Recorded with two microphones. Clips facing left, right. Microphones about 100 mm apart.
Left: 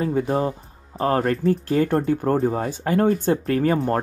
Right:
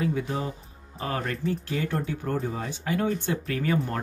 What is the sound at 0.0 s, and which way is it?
Speech, 45° left (ahead or behind).